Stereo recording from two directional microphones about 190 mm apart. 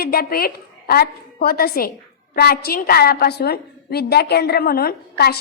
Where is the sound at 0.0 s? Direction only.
50° left (ahead or behind).